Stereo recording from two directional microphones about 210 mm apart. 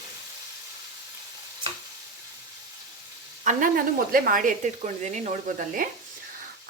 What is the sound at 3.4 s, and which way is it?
Speech, 40° right (ahead or behind).